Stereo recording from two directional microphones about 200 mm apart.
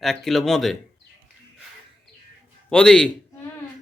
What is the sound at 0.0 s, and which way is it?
Speech, centre (ahead or behind).